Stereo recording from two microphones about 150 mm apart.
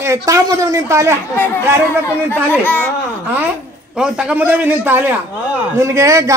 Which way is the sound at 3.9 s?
5° right (ahead or behind).